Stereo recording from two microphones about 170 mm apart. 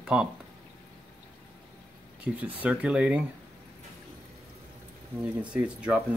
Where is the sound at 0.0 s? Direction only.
5° right (ahead or behind).